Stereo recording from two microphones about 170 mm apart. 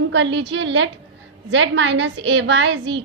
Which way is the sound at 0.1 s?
90° right.